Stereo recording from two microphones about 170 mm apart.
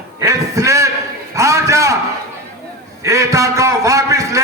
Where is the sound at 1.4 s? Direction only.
20° right (ahead or behind).